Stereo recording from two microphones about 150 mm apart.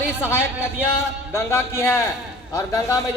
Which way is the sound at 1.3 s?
15° left (ahead or behind).